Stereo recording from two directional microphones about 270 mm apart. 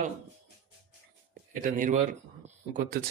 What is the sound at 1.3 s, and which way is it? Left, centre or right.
Speech, right.